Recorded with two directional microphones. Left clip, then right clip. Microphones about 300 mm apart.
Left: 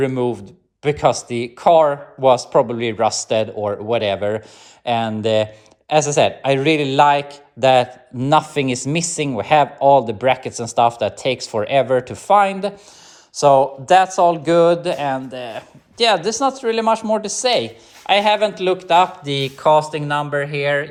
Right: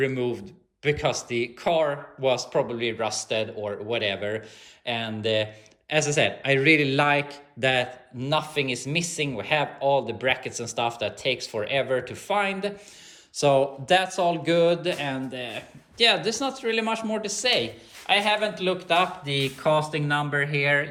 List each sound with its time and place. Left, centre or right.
0.0 s speech: centre